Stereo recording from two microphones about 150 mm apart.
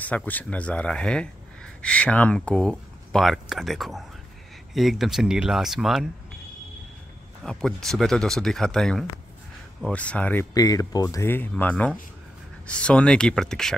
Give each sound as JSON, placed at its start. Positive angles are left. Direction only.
{"t": 0.0, "sound": "speech", "side_deg": 10}
{"t": 7.4, "sound": "speech", "side_deg": 5}
{"t": 10.5, "sound": "speech", "side_deg": 25}